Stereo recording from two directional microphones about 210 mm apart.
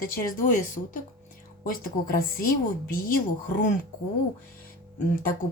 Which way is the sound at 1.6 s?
45° left (ahead or behind).